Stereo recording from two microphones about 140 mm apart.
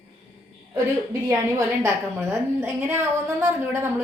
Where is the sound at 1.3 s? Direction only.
20° right (ahead or behind).